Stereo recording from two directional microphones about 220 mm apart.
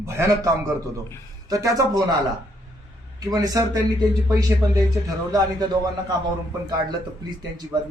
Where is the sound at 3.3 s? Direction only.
15° right (ahead or behind).